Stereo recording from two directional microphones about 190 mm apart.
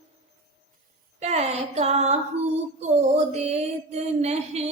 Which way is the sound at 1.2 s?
35° right (ahead or behind).